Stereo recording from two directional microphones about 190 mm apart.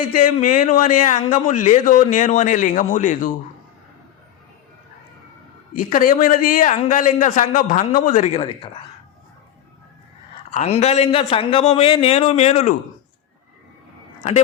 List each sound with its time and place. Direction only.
0.2 s a man's voice: 40° left (ahead or behind)
5.7 s a man's voice: 45° left (ahead or behind); by 8.7 s 30° left (ahead or behind)
10.5 s a man's voice: 35° left (ahead or behind)